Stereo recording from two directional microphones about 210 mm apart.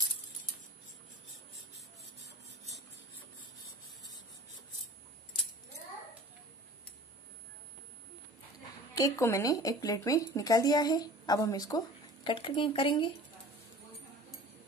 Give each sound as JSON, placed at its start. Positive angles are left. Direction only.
{"t": 8.9, "sound": "speech", "side_deg": 15}